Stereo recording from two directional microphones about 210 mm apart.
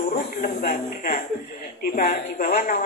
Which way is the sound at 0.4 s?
40° left (ahead or behind).